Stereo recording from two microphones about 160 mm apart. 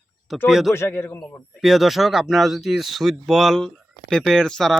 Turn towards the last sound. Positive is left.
turn(degrees=5)  # may be behind; listen again after turning